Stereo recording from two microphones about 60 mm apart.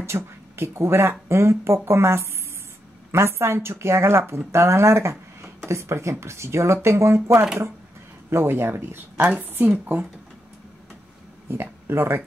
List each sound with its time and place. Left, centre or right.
0.0 s speech: right
8.3 s speech: right
11.4 s speech: right